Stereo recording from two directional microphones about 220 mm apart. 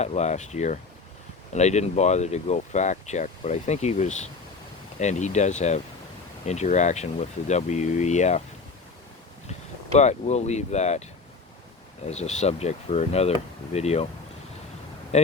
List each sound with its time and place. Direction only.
0.0 s speech: 30° left (ahead or behind)
9.5 s speech: 30° left (ahead or behind)
12.0 s speech: 30° left (ahead or behind)
15.1 s speech: 30° left (ahead or behind)